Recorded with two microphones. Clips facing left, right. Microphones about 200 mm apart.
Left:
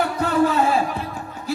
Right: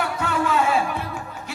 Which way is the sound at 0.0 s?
35° left (ahead or behind).